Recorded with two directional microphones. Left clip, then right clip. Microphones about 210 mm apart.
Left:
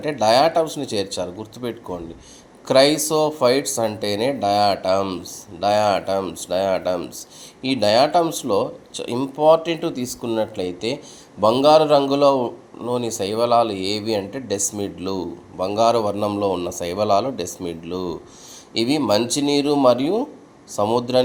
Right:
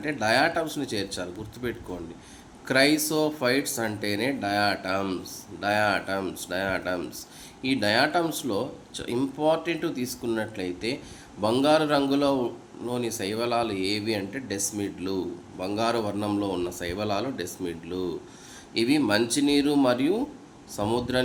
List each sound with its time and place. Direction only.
0.0 s a man's voice: 25° left (ahead or behind)